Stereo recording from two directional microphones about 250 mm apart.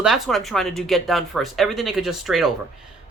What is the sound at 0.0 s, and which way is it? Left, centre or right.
Speech, centre.